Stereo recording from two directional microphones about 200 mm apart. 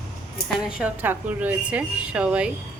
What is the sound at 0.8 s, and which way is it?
A woman's voice, 10° right (ahead or behind).